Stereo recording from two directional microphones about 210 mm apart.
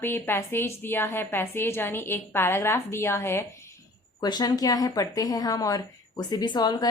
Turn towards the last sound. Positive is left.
turn(degrees=20)  # may be behind; listen again after turning